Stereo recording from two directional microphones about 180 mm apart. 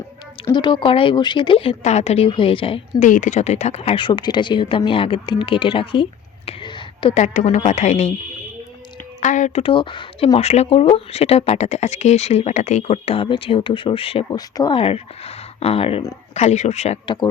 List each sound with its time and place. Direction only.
0.4 s speech: 25° left (ahead or behind)
3.1 s speech: 45° left (ahead or behind); by 7.2 s 25° left (ahead or behind)
7.2 s speech: 40° left (ahead or behind)
9.2 s speech: 40° left (ahead or behind)
9.6 s speech: 30° left (ahead or behind)